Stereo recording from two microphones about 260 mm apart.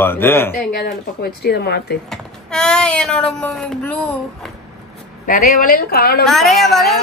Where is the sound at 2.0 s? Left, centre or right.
Centre.